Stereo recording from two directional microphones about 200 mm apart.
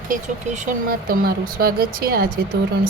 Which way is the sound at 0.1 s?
40° right (ahead or behind).